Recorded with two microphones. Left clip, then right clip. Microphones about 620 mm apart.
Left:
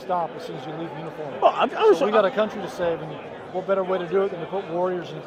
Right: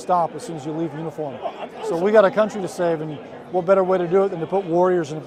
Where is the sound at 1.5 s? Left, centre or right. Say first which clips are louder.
Left 15 dB; left.